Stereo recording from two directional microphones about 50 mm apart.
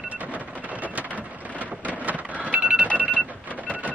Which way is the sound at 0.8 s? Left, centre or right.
Right.